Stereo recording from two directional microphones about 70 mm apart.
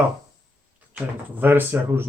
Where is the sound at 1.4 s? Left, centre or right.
Right.